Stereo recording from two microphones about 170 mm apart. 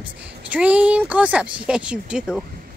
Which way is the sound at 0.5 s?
10° right (ahead or behind).